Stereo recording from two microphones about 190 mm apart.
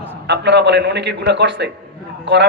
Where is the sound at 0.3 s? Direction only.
65° right (ahead or behind).